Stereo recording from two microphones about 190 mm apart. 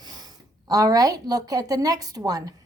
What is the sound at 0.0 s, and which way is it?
A woman's voice, 20° right (ahead or behind).